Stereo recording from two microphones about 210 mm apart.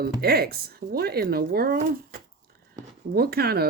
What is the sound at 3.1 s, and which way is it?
Speech, 45° right (ahead or behind).